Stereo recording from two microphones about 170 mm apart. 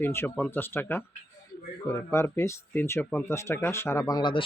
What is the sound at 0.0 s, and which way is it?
Speech, 15° left (ahead or behind).